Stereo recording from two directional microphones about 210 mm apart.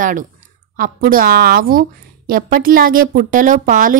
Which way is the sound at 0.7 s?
40° right (ahead or behind).